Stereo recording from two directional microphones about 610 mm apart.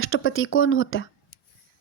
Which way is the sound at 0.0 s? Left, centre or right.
Centre.